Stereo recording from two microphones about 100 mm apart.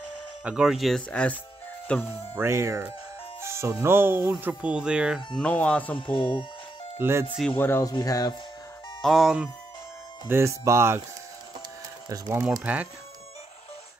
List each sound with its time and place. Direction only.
0.4 s speech: 10° right (ahead or behind); by 2.1 s 20° left (ahead or behind)
2.3 s speech: 25° right (ahead or behind); by 5.2 s 10° right (ahead or behind)
5.3 s speech: 10° left (ahead or behind)
6.1 s speech: 55° left (ahead or behind)
7.0 s speech: 25° right (ahead or behind)
7.5 s speech: 20° left (ahead or behind)
7.9 s speech: 40° left (ahead or behind)
9.0 s speech: centre (ahead or behind)
10.2 s speech: 25° right (ahead or behind)
12.7 s speech: 15° right (ahead or behind)